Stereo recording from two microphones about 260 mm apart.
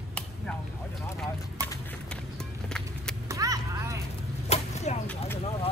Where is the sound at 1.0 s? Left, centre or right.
Centre.